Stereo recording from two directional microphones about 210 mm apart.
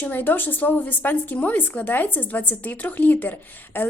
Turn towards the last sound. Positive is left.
turn(degrees=10)  # may be behind; listen again after turning